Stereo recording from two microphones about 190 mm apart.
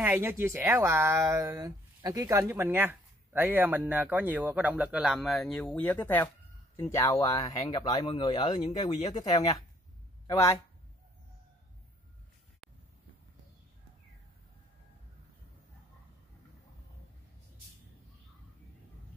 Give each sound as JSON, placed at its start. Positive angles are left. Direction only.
{"t": 0.0, "sound": "a man's voice", "side_deg": -10}